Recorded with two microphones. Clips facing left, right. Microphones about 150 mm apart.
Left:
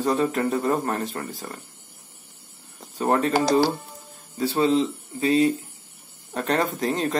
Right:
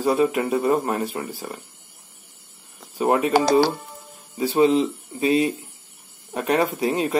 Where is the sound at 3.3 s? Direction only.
70° right (ahead or behind).